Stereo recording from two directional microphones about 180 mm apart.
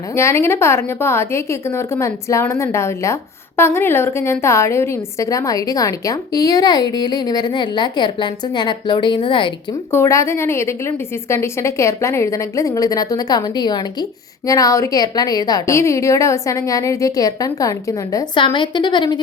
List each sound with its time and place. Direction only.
0.2 s a woman's voice: 15° left (ahead or behind)
9.9 s a woman's voice: 15° left (ahead or behind)